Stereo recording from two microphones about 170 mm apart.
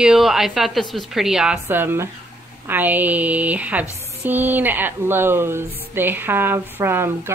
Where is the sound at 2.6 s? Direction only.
10° right (ahead or behind).